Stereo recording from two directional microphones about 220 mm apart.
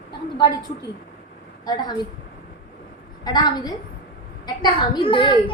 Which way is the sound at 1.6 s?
20° left (ahead or behind).